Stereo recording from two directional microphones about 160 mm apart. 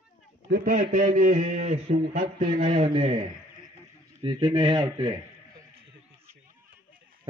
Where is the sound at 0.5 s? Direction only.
55° right (ahead or behind); by 3.2 s 35° right (ahead or behind).